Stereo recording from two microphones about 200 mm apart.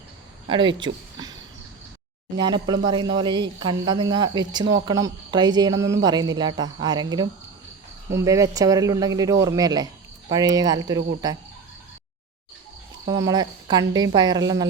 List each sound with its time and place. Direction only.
0.4 s speech: 25° right (ahead or behind)
13.1 s speech: 15° right (ahead or behind)